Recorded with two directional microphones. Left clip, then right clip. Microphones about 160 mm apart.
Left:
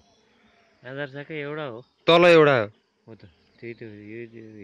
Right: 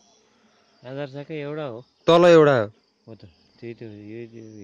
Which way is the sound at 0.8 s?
90° right.